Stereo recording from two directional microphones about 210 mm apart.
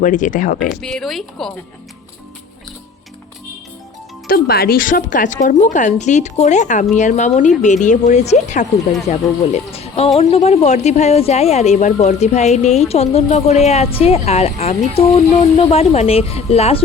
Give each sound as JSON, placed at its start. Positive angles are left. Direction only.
{"t": 0.0, "sound": "speech", "side_deg": 40}
{"t": 0.8, "sound": "speech", "side_deg": 5}
{"t": 4.3, "sound": "speech", "side_deg": 45}